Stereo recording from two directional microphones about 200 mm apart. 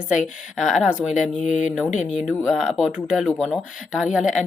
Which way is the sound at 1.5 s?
35° left (ahead or behind).